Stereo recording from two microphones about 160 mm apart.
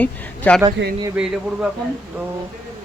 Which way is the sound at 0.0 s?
10° left (ahead or behind).